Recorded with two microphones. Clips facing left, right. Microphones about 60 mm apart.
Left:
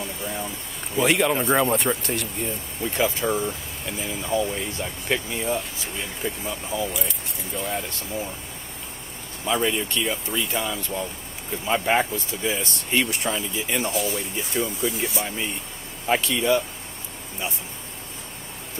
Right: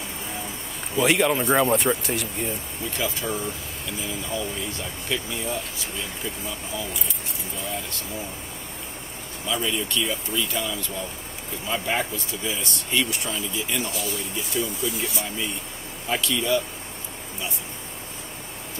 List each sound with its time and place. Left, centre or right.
0.9 s speech: centre
3.0 s speech: left
9.5 s speech: left